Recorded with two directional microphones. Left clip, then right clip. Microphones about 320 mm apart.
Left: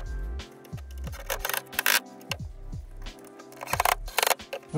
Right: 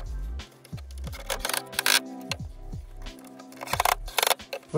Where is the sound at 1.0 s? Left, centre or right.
Centre.